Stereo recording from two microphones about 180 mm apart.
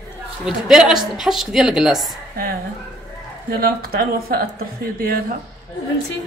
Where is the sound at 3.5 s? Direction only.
55° right (ahead or behind).